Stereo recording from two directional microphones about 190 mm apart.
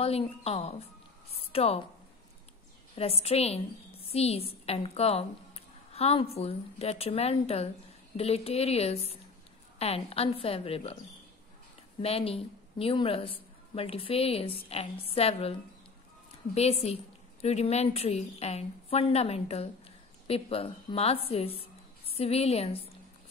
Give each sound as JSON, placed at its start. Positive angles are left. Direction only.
{"t": 0.0, "sound": "a woman's voice", "side_deg": 30}
{"t": 1.3, "sound": "a sound", "side_deg": 30}
{"t": 3.0, "sound": "a woman's voice", "side_deg": 30}
{"t": 12.0, "sound": "a woman's voice", "side_deg": 30}
{"t": 16.5, "sound": "a woman's voice", "side_deg": 35}